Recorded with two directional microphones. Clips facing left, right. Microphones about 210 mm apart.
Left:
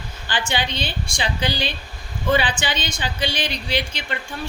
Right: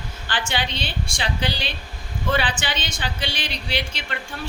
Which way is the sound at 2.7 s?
Centre (ahead or behind).